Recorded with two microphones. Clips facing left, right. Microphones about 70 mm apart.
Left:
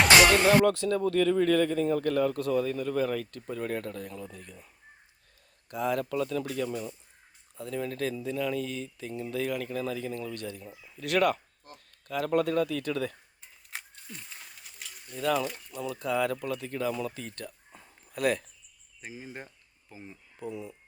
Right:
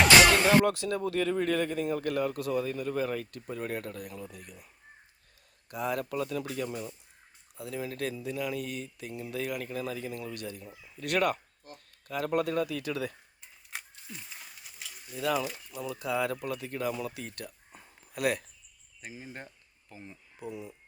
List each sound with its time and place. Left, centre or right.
0.6 s speech: centre
19.0 s speech: centre
20.4 s speech: centre